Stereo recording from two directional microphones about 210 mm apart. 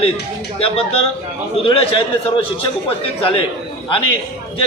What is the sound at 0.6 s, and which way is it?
A man's voice, 25° left (ahead or behind).